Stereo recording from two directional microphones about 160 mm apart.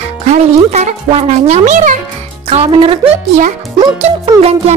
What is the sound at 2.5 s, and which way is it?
Speech, 35° right (ahead or behind).